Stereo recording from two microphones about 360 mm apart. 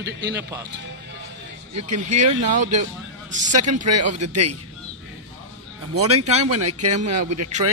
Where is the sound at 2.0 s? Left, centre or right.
Right.